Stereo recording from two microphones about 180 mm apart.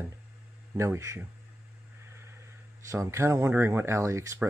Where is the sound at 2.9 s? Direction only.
15° right (ahead or behind).